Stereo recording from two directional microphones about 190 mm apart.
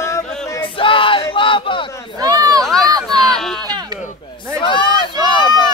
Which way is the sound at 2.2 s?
20° right (ahead or behind).